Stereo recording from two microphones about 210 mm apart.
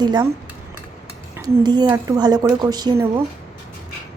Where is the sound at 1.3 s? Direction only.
15° right (ahead or behind).